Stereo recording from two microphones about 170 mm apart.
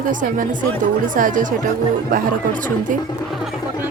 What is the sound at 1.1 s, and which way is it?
Speech, 50° right (ahead or behind).